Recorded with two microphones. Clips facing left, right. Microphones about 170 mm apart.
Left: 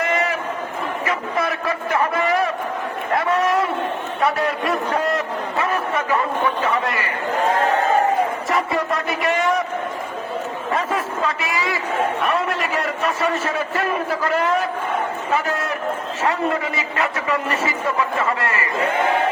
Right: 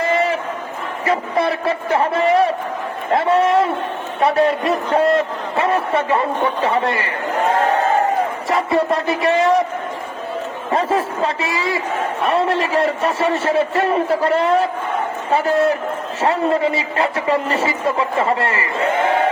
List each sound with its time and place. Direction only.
0.0 s a sound: 30° right (ahead or behind)
1.0 s a man's voice: 30° right (ahead or behind)
8.4 s a man's voice: 30° right (ahead or behind)
10.7 s a man's voice: 30° right (ahead or behind)